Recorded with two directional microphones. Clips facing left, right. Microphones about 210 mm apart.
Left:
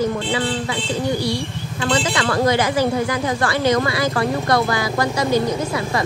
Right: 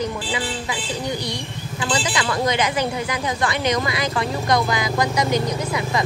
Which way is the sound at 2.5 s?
20° right (ahead or behind).